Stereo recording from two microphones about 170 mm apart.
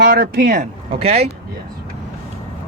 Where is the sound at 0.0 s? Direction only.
65° right (ahead or behind).